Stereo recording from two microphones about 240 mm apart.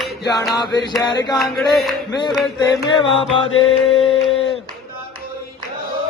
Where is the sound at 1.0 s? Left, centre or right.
Centre.